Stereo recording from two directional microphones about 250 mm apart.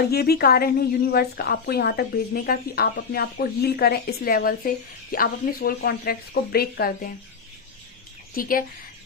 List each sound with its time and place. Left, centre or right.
0.1 s a woman's voice: left
8.4 s a woman's voice: left